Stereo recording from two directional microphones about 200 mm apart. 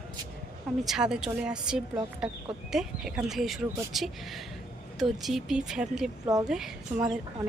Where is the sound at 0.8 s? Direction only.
5° right (ahead or behind).